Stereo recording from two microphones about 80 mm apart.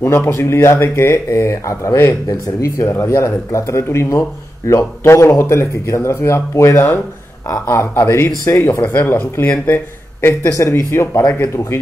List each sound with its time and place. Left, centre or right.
0.0 s speech: left
10.9 s speech: left